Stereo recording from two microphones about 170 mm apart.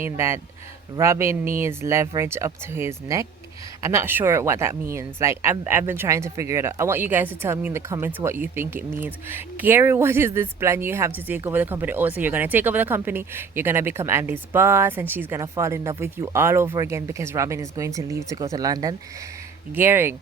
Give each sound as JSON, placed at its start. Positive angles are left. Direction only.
{"t": 0.0, "sound": "speech", "side_deg": -15}